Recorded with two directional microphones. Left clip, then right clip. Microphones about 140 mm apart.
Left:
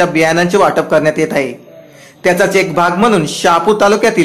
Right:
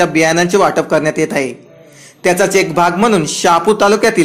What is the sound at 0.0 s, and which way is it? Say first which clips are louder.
Speech: left 1 dB; 25° right (ahead or behind).